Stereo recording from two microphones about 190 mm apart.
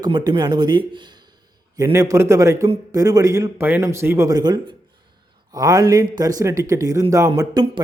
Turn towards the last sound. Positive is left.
turn(degrees=-20)  # may be behind; listen again after turning